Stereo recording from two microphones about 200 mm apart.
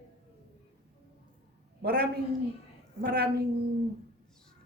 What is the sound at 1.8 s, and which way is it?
A man's voice, 55° right (ahead or behind).